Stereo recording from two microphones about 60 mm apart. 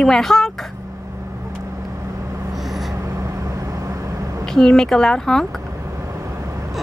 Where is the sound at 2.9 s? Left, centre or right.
Right.